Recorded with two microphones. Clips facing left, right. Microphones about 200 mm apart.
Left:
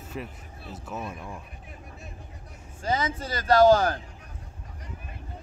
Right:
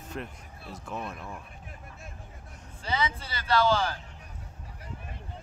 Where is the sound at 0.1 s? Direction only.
5° left (ahead or behind).